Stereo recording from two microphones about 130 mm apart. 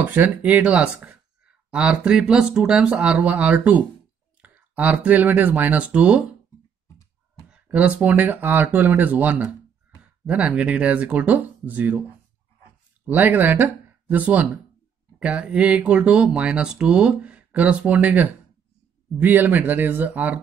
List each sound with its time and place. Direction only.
0.0 s speech: 15° right (ahead or behind)
7.4 s speech: 10° right (ahead or behind)
13.0 s speech: 15° right (ahead or behind)